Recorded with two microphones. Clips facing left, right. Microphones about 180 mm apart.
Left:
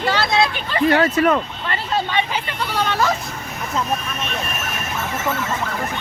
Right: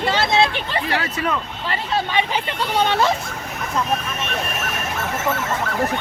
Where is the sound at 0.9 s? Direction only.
45° left (ahead or behind).